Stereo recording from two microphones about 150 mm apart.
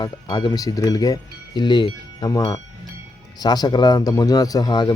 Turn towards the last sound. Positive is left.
turn(degrees=25)  # may be behind; listen again after turning